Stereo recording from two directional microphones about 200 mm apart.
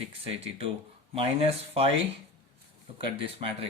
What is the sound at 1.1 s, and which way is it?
Speech, 30° right (ahead or behind).